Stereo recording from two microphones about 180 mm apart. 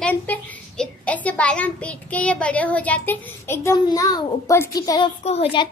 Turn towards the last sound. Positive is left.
turn(degrees=30)  # may be behind; listen again after turning